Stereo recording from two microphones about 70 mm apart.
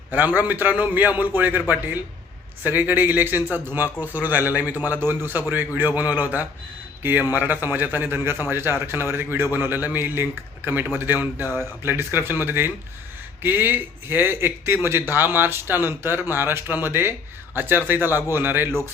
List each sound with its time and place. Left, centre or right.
0.1 s a man's voice: right